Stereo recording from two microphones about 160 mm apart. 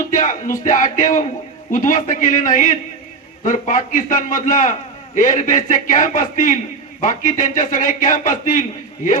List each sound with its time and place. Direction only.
0.1 s a man's voice: 55° left (ahead or behind)